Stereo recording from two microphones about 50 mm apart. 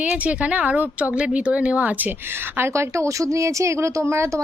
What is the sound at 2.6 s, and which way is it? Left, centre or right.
Speech, right.